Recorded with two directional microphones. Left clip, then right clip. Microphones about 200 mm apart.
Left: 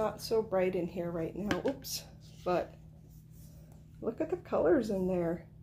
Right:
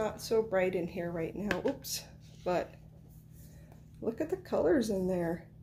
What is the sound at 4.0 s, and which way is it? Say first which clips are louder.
Speech: even; 20° right (ahead or behind).